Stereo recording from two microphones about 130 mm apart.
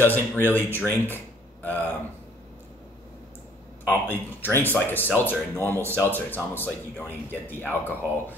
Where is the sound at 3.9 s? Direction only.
15° left (ahead or behind).